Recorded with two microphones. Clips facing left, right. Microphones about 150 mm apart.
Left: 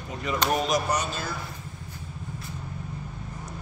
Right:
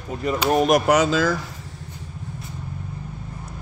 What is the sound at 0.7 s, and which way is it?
Speech, 75° right (ahead or behind).